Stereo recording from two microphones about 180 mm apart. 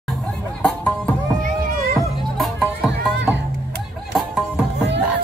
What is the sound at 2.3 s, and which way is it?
Music, centre (ahead or behind).